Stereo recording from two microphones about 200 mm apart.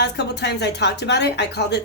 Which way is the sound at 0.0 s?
55° left (ahead or behind).